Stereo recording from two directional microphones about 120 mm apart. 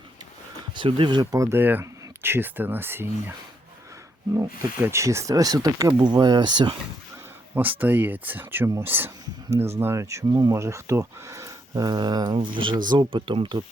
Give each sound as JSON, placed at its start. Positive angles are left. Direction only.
{"t": 0.8, "sound": "speech", "side_deg": -45}
{"t": 4.4, "sound": "speech", "side_deg": -20}
{"t": 7.5, "sound": "speech", "side_deg": -15}